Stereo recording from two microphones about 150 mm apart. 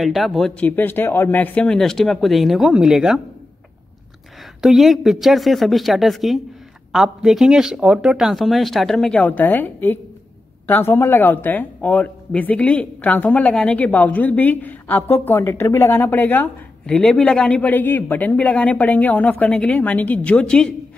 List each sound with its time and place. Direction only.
0.0 s a man's voice: centre (ahead or behind)
4.6 s a man's voice: centre (ahead or behind)